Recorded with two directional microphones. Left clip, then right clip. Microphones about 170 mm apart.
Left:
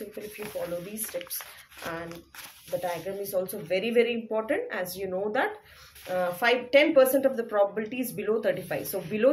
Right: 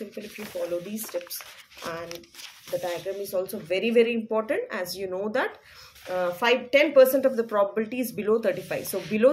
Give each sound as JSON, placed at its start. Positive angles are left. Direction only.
{"t": 0.9, "sound": "speech", "side_deg": -20}